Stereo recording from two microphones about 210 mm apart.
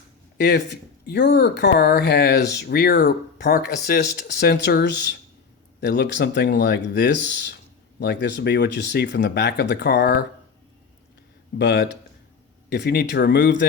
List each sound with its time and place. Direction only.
0.3 s speech: 55° left (ahead or behind)
11.5 s speech: 50° left (ahead or behind)